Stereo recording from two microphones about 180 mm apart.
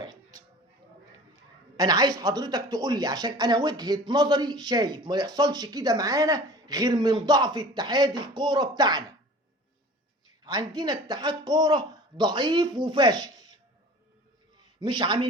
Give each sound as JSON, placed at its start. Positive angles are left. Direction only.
{"t": 1.7, "sound": "speech", "side_deg": -20}
{"t": 10.4, "sound": "speech", "side_deg": -20}
{"t": 14.8, "sound": "speech", "side_deg": -25}